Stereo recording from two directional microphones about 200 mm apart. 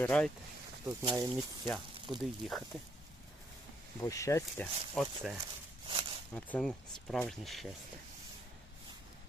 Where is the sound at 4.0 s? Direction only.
15° left (ahead or behind).